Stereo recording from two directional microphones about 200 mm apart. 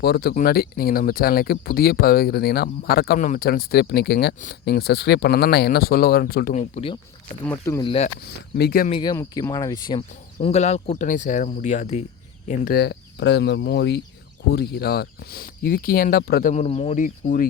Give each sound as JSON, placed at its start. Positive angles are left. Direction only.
{"t": 0.0, "sound": "speech", "side_deg": 55}
{"t": 6.5, "sound": "speech", "side_deg": 35}
{"t": 7.4, "sound": "speech", "side_deg": 10}
{"t": 7.9, "sound": "speech", "side_deg": 30}
{"t": 8.5, "sound": "speech", "side_deg": 50}
{"t": 8.9, "sound": "speech", "side_deg": 20}
{"t": 10.4, "sound": "speech", "side_deg": 35}
{"t": 12.5, "sound": "speech", "side_deg": 45}
{"t": 16.5, "sound": "speech", "side_deg": 35}